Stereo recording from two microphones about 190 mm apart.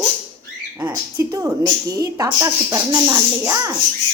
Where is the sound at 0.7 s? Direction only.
10° right (ahead or behind).